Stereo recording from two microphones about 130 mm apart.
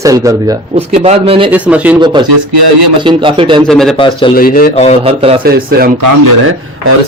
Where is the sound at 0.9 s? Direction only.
50° right (ahead or behind).